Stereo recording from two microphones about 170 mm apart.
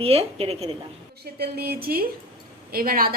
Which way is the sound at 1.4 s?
65° right (ahead or behind).